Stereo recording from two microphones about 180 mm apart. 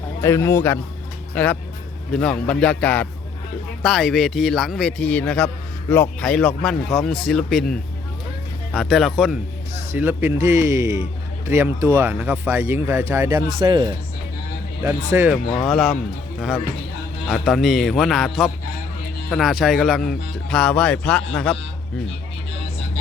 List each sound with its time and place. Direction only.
0.2 s a man's voice: 15° left (ahead or behind); by 13.4 s 15° right (ahead or behind)
13.6 s speech: 25° right (ahead or behind)
14.8 s speech: 10° right (ahead or behind)
15.6 s speech: centre (ahead or behind)
17.2 s speech: centre (ahead or behind)